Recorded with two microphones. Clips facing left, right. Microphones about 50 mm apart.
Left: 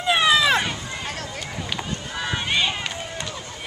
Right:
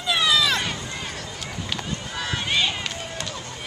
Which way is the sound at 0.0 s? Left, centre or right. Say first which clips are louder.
Left 3 dB; left.